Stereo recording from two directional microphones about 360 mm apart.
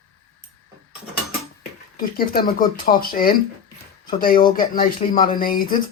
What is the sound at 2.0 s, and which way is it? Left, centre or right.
Speech, left.